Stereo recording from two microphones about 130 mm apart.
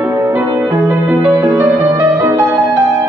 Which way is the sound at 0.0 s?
15° right (ahead or behind).